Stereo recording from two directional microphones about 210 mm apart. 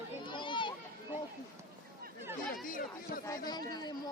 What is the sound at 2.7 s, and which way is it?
Speech, 40° left (ahead or behind).